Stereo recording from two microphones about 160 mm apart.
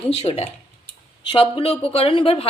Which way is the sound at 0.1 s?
40° left (ahead or behind).